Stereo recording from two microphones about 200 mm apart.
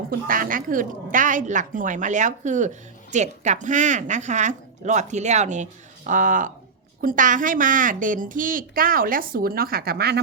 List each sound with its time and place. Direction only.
0.1 s a woman's voice: 45° right (ahead or behind)